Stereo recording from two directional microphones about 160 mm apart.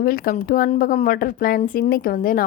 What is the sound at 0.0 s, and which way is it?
Speech, 65° left (ahead or behind).